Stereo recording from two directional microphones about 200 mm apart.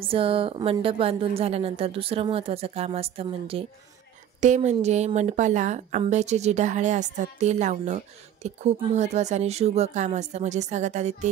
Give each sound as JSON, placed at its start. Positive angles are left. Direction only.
{"t": 0.0, "sound": "a woman's voice", "side_deg": -25}